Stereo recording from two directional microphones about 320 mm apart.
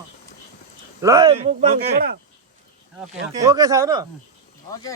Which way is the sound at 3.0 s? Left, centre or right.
Centre.